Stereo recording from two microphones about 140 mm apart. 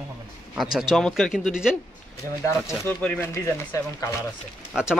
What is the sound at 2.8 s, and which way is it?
Speech, 15° left (ahead or behind).